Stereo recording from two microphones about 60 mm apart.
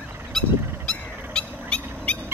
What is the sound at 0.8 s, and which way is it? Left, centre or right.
Bird, centre.